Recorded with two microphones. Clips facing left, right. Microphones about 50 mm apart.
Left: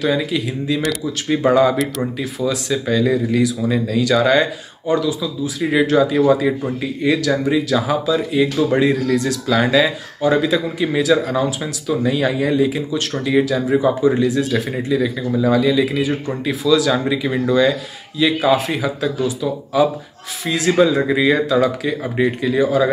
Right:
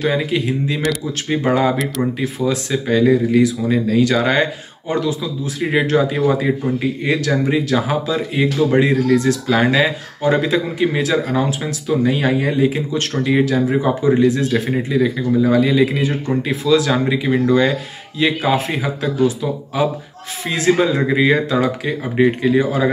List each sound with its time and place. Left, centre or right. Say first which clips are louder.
0.0 s speech: right 1 dB; right
3.8 s speech: even; right
14.7 s speech: right 2 dB; right